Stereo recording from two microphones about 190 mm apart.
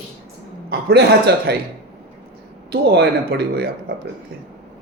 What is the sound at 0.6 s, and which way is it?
Speech, 60° right (ahead or behind).